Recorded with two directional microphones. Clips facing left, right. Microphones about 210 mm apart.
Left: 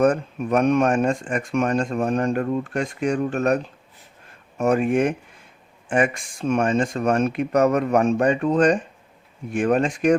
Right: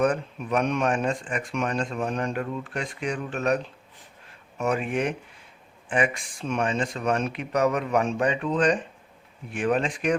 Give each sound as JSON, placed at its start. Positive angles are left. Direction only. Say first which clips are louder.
{"t": 0.0, "sound": "speech", "louder": "left 5 dB", "side_deg": 45}